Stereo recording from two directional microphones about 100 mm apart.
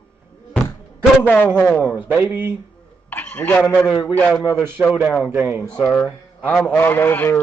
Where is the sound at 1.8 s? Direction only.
20° right (ahead or behind).